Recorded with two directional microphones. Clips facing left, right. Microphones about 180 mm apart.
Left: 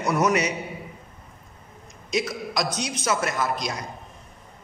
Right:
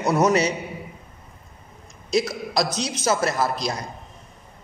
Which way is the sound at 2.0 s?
35° right (ahead or behind).